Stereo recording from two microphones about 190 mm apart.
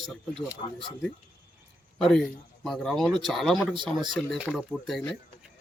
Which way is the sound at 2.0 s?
5° left (ahead or behind).